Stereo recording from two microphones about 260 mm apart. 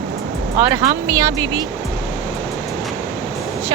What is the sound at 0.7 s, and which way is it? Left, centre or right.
Speech, centre.